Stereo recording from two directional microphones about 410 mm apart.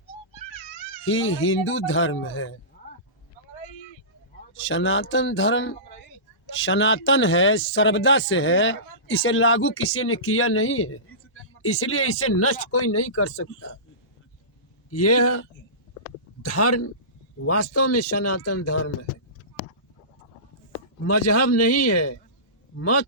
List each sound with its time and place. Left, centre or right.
1.0 s speech: left
4.5 s speech: left
14.8 s speech: left
20.7 s speech: left